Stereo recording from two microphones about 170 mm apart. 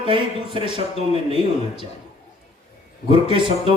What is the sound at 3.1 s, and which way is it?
Speech, 30° right (ahead or behind).